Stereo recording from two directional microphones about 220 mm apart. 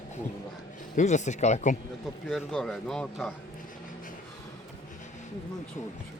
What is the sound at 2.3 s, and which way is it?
A man's voice, centre (ahead or behind).